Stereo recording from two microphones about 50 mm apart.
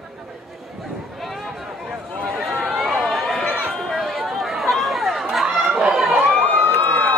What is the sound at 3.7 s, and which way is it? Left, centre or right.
Chatter, centre.